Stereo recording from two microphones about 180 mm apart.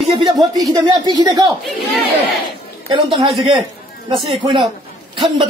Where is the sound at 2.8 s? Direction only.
30° right (ahead or behind).